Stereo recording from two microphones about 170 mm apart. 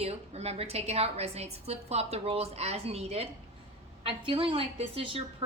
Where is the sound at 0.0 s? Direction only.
35° right (ahead or behind).